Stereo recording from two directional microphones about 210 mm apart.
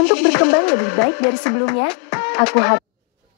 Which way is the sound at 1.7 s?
55° left (ahead or behind).